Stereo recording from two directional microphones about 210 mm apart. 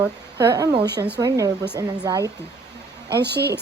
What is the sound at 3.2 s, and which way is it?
Speech, 50° right (ahead or behind).